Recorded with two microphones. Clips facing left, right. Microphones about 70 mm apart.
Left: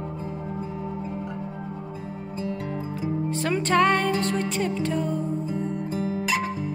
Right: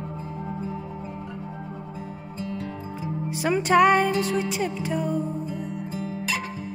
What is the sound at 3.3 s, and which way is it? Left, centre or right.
Music, centre.